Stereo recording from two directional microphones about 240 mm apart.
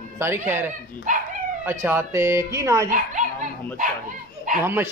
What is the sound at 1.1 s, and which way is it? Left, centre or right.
Speech, right.